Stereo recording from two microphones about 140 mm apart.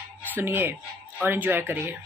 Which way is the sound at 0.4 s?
15° right (ahead or behind).